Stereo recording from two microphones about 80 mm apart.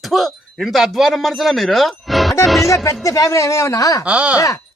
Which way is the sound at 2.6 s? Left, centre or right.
Left.